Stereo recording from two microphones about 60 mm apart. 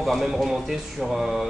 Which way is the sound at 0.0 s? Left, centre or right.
Centre.